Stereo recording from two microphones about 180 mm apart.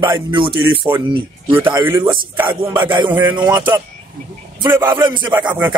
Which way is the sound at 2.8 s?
25° right (ahead or behind).